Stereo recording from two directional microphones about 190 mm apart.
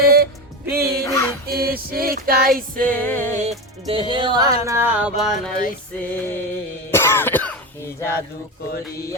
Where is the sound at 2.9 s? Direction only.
10° left (ahead or behind).